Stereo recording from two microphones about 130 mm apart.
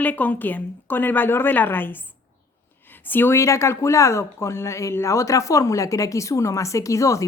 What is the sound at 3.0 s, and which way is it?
Speech, 15° left (ahead or behind).